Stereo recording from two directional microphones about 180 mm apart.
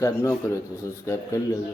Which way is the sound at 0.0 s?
15° left (ahead or behind).